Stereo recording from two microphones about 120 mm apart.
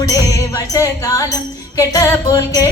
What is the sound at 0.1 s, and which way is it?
Music, 25° left (ahead or behind).